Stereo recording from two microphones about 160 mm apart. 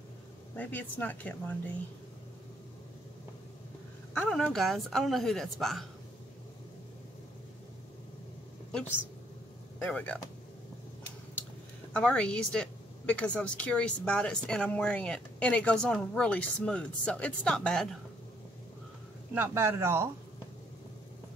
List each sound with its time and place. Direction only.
0.6 s a woman's voice: 10° left (ahead or behind)
4.1 s speech: 5° left (ahead or behind)
9.8 s speech: 10° left (ahead or behind)
11.9 s a woman's voice: 5° left (ahead or behind)
19.3 s a man's voice: 15° right (ahead or behind)